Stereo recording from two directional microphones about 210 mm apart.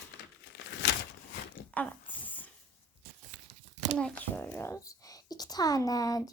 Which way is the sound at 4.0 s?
5° left (ahead or behind).